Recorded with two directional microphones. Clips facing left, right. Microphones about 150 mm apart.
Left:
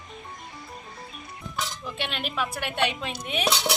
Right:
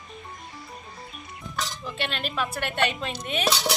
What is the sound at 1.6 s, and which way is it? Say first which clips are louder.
Speech: right 1 dB; 10° left (ahead or behind).